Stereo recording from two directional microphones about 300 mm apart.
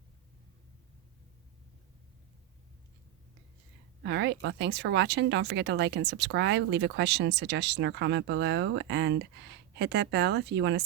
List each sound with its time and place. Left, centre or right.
4.0 s speech: right